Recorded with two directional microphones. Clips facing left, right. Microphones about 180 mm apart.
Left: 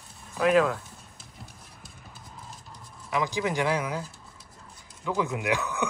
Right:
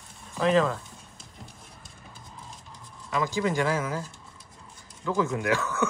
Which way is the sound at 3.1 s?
15° left (ahead or behind).